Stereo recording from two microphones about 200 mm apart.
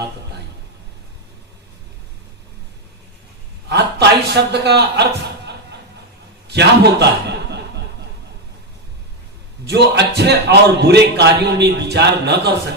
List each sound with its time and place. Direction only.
3.6 s a man's voice: 55° right (ahead or behind)
9.7 s a man's voice: 60° right (ahead or behind)